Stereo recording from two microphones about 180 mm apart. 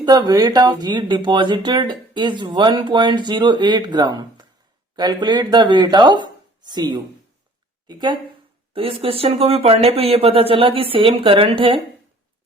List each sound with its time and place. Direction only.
0.0 s speech: 20° right (ahead or behind)